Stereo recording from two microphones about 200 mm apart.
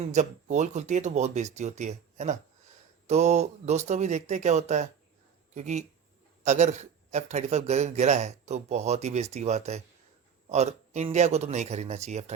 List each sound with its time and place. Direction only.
0.1 s a man's voice: 35° right (ahead or behind)